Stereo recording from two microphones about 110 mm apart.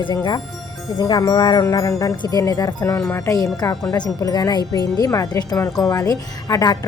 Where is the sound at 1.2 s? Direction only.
35° left (ahead or behind).